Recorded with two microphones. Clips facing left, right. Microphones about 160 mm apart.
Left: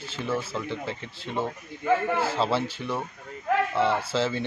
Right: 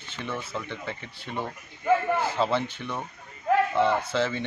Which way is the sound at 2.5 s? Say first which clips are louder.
Left 1 dB; 5° left (ahead or behind).